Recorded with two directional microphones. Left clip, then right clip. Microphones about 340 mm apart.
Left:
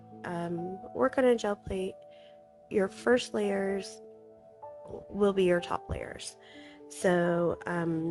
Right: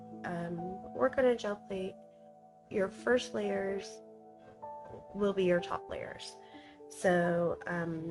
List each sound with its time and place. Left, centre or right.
0.2 s music: left
0.9 s speech: left
5.2 s speech: left